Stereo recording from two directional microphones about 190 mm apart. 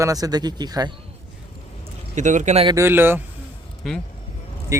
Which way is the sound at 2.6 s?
15° right (ahead or behind).